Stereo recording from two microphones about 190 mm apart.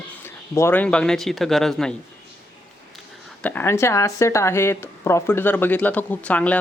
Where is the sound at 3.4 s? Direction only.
10° left (ahead or behind).